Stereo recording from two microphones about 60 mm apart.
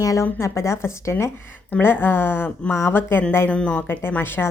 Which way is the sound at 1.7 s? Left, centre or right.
Left.